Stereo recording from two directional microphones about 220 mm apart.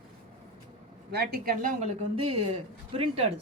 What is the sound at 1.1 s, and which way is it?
A woman's voice, 45° right (ahead or behind).